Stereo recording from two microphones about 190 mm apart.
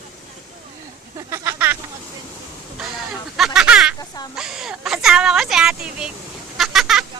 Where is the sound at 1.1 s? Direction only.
15° right (ahead or behind).